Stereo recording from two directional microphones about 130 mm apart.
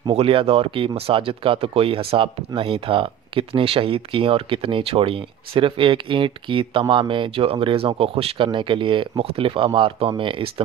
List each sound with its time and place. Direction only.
0.1 s speech: 45° right (ahead or behind)